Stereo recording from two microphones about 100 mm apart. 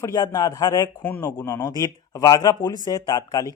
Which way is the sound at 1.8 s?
40° left (ahead or behind).